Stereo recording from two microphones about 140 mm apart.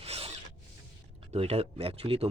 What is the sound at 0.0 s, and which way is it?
Zipper, 45° right (ahead or behind).